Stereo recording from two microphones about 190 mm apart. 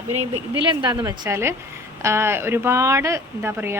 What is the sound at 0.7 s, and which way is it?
Speech, 20° right (ahead or behind).